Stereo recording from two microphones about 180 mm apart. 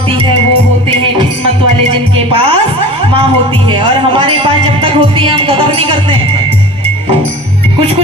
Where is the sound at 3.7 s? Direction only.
30° right (ahead or behind).